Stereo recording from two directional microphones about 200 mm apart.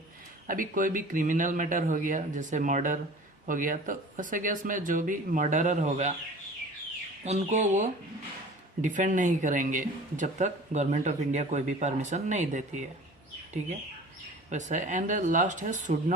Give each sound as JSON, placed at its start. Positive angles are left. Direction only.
{"t": 0.4, "sound": "speech", "side_deg": -45}
{"t": 7.3, "sound": "speech", "side_deg": -35}
{"t": 14.5, "sound": "speech", "side_deg": -35}